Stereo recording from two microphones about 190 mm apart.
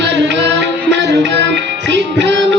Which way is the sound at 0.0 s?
65° right (ahead or behind).